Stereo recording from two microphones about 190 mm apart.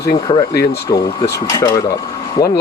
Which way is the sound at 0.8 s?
20° left (ahead or behind).